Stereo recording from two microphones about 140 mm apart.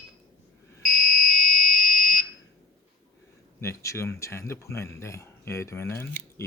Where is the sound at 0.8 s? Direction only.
70° left (ahead or behind).